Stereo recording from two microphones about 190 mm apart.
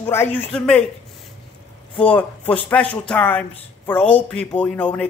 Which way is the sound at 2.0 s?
10° left (ahead or behind).